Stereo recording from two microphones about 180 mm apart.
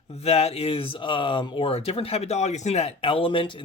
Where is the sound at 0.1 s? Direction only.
35° left (ahead or behind).